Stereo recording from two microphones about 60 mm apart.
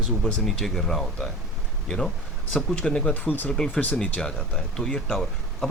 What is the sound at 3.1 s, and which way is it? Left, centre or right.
Speech, left.